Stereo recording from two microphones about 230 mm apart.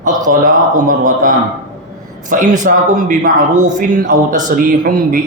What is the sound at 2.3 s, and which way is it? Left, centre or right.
A man's voice, right.